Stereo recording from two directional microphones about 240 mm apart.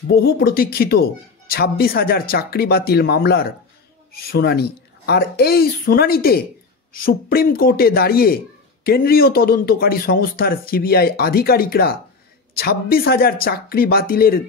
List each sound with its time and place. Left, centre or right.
0.1 s speech: left